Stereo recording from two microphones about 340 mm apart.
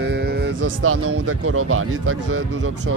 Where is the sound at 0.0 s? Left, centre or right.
Right.